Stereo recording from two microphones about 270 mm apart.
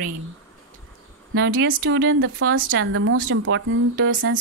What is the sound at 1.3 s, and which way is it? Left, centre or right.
A woman's voice, right.